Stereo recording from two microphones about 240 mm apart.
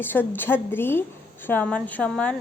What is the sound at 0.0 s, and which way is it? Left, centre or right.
Speech, centre.